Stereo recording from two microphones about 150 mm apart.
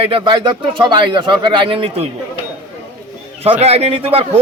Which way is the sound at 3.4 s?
45° right (ahead or behind).